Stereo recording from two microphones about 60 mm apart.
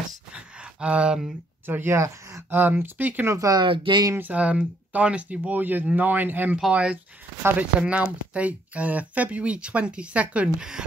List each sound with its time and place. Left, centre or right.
0.3 s a sound: centre
1.7 s speech: right
2.5 s speech: right
3.3 s speech: right
4.2 s speech: right
6.7 s speech: right